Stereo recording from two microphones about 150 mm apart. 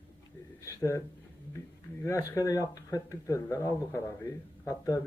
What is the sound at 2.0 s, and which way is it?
A man's voice, 20° left (ahead or behind).